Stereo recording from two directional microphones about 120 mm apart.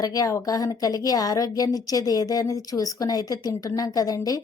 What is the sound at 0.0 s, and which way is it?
A woman's voice, 30° left (ahead or behind).